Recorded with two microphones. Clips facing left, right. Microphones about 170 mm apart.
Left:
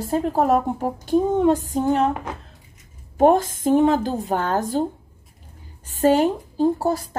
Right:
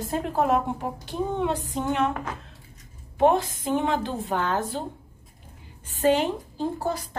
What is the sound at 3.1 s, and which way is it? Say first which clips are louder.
A woman's voice: left 5 dB; 45° left (ahead or behind).